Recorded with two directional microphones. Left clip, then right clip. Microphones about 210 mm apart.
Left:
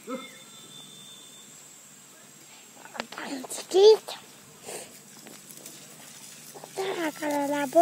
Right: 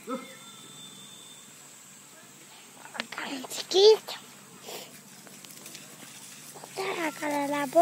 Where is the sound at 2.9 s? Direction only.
30° left (ahead or behind).